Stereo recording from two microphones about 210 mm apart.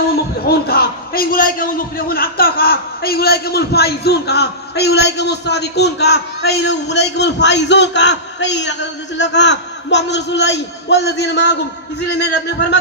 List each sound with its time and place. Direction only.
0.4 s a man's voice: 45° left (ahead or behind)